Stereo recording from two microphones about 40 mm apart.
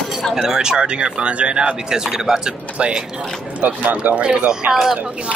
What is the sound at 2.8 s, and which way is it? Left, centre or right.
Speech, right.